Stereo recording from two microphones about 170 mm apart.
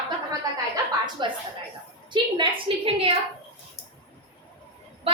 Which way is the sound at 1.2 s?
25° right (ahead or behind).